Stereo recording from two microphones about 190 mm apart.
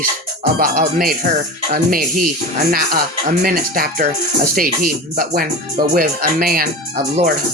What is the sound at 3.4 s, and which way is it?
Speech, 50° right (ahead or behind).